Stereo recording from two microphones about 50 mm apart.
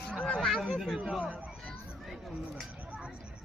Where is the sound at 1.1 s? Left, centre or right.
Right.